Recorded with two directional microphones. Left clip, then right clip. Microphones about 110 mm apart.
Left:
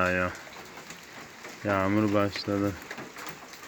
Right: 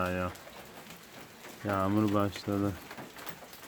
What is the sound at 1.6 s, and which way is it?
Speech, centre (ahead or behind).